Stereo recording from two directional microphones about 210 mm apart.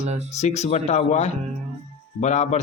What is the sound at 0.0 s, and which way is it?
Speech, 30° right (ahead or behind).